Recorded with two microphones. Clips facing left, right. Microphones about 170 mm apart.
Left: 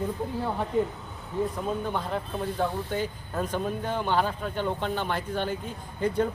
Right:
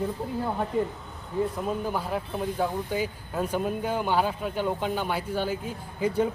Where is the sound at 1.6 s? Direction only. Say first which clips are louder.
Right 1 dB; 5° right (ahead or behind).